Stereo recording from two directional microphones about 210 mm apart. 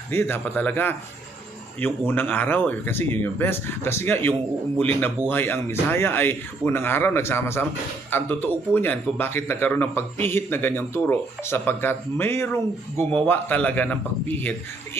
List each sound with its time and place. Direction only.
0.1 s a man's voice: 10° left (ahead or behind)